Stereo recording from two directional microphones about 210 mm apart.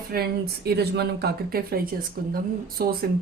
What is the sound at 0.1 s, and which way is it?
Speech, 50° right (ahead or behind).